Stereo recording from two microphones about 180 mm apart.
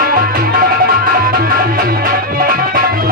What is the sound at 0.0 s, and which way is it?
Music, 55° right (ahead or behind).